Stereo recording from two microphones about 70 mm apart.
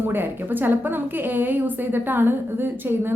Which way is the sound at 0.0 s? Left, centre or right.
Right.